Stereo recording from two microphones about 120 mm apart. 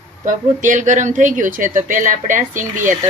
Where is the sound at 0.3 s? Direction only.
90° right.